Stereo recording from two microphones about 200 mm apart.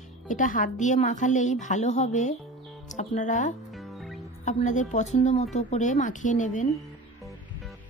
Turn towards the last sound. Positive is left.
turn(degrees=40)  # may be behind; listen again after turning